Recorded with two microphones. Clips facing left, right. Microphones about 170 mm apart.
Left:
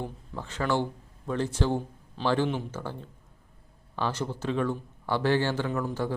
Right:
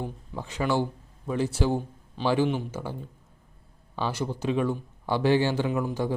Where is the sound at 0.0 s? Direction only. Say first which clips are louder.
Right 2 dB; 15° right (ahead or behind).